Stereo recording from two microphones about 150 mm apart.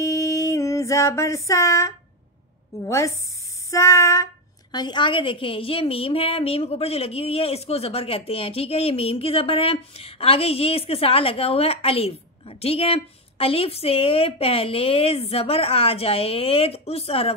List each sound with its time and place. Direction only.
0.0 s music: 20° left (ahead or behind)
2.8 s child singing: 20° left (ahead or behind)
4.7 s a woman's voice: 30° left (ahead or behind)